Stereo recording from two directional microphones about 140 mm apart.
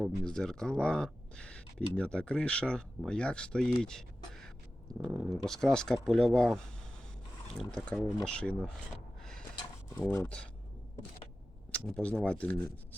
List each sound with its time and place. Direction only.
0.3 s speech: 5° left (ahead or behind)
10.1 s speech: 20° left (ahead or behind)
11.7 s speech: 5° left (ahead or behind)